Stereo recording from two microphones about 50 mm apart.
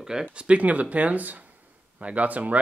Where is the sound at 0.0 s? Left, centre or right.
Centre.